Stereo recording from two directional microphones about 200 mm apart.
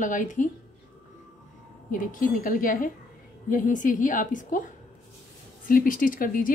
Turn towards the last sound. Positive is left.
turn(degrees=45)  # may be behind; listen again after turning